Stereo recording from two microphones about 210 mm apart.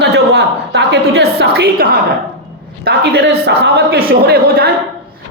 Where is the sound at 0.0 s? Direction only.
50° right (ahead or behind).